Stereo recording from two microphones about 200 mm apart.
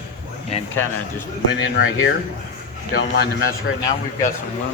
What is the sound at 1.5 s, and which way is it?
Speech, 90° left.